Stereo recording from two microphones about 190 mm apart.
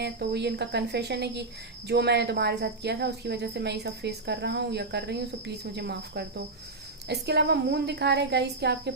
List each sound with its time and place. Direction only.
0.0 s speech: 60° right (ahead or behind)